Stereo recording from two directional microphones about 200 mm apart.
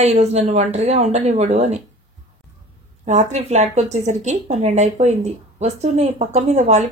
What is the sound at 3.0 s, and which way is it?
Speech, 35° right (ahead or behind).